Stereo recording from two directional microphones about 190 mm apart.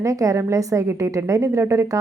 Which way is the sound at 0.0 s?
15° right (ahead or behind).